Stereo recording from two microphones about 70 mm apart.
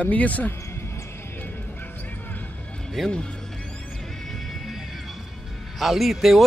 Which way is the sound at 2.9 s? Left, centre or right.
Centre.